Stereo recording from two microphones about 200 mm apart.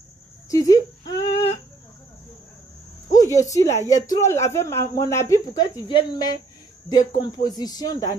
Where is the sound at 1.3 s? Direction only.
30° left (ahead or behind).